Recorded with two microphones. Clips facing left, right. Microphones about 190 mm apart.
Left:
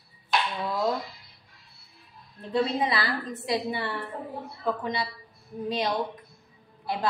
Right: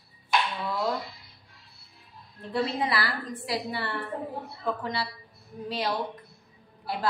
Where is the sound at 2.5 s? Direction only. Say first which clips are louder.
Left 2 dB; 20° left (ahead or behind).